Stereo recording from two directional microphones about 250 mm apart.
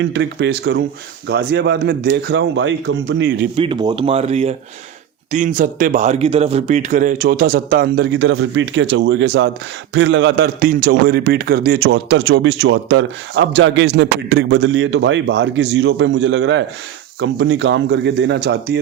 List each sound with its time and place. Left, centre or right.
0.0 s a man's voice: right
3.5 s a man's voice: right